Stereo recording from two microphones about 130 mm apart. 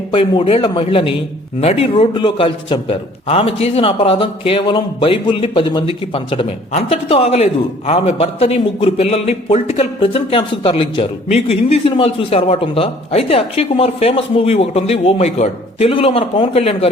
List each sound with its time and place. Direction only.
0.1 s a man's voice: 40° left (ahead or behind)